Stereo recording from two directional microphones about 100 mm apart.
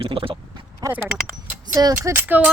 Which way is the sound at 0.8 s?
35° right (ahead or behind).